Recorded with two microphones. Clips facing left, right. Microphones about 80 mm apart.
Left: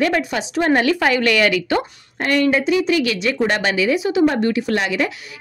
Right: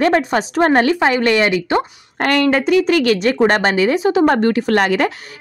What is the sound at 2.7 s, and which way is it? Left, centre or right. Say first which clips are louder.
Speech: right 4 dB; right.